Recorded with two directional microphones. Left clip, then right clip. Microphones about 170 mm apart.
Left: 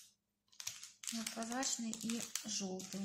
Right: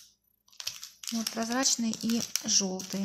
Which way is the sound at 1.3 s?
40° right (ahead or behind).